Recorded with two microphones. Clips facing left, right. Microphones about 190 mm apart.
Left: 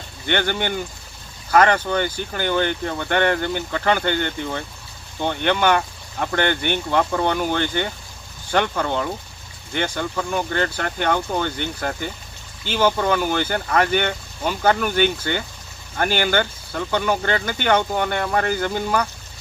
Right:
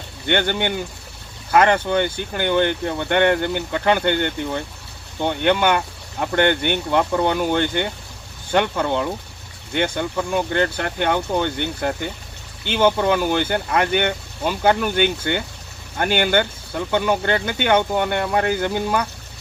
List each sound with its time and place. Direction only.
0.3 s speech: 20° right (ahead or behind)
5.2 s speech: 15° right (ahead or behind)